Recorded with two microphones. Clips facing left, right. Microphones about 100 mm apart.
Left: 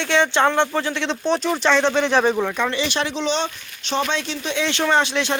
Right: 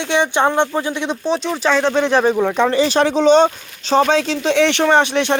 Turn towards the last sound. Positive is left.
turn(degrees=-20)  # may be behind; listen again after turning